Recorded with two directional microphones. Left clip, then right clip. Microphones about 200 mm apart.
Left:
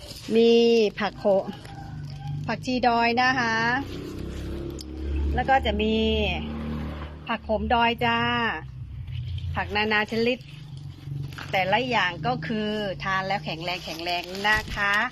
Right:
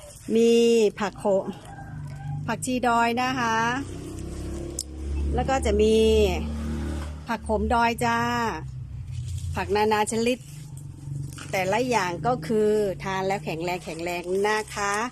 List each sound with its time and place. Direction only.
0.3 s speech: 15° right (ahead or behind)
5.3 s speech: 15° right (ahead or behind)
11.6 s speech: 20° right (ahead or behind)